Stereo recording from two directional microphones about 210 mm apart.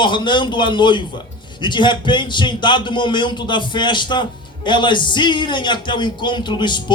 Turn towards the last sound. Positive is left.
turn(degrees=20)  # may be behind; listen again after turning